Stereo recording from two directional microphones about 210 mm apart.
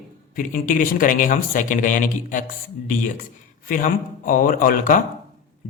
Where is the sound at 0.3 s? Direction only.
40° left (ahead or behind).